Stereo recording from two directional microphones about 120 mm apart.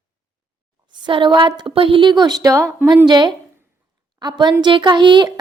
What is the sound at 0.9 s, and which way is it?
A woman's voice, 40° right (ahead or behind).